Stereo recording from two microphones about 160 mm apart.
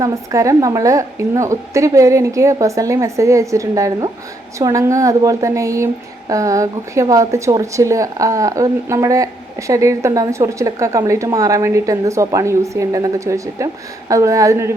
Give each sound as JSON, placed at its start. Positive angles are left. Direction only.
{"t": 0.0, "sound": "a woman's voice", "side_deg": -20}